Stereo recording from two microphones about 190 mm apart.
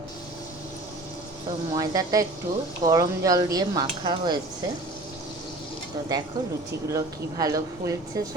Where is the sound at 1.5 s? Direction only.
20° right (ahead or behind).